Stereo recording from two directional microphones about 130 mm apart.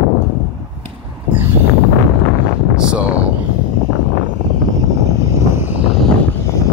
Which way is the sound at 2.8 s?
10° right (ahead or behind).